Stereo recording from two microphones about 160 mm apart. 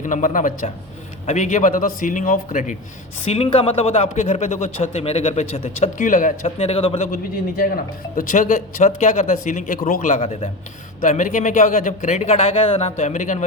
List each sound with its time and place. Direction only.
0.0 s a man's voice: 55° left (ahead or behind)
3.2 s a man's voice: 40° left (ahead or behind)
7.1 s a man's voice: 65° left (ahead or behind)
8.1 s a man's voice: 55° left (ahead or behind)
10.2 s a man's voice: 40° left (ahead or behind)
11.0 s a man's voice: 50° left (ahead or behind)